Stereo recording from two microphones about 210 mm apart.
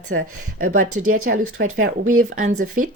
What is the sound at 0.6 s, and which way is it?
Speech, 40° right (ahead or behind).